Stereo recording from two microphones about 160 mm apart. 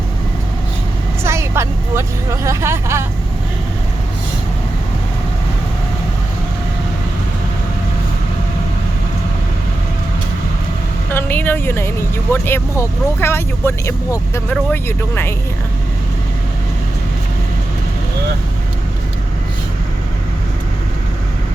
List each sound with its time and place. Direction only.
1.2 s speech: 15° right (ahead or behind)
11.1 s speech: 10° left (ahead or behind)